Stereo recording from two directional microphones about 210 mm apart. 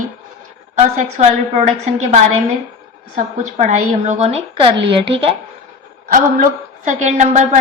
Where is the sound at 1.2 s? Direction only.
30° right (ahead or behind).